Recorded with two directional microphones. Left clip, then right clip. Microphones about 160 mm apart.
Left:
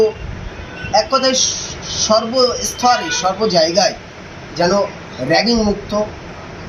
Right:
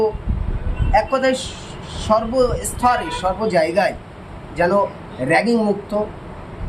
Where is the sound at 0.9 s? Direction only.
35° right (ahead or behind).